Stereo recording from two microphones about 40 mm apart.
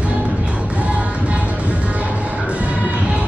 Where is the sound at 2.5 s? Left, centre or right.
Right.